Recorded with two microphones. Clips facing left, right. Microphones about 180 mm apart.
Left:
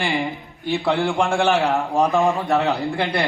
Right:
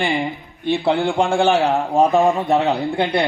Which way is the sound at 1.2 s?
30° right (ahead or behind).